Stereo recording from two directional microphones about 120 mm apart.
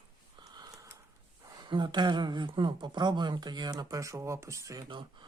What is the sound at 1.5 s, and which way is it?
Speech, 40° right (ahead or behind).